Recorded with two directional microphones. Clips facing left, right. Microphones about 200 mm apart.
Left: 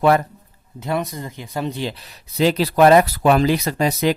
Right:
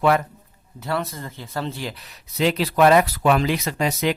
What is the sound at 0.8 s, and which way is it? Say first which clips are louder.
Speech: left 3 dB; 15° left (ahead or behind).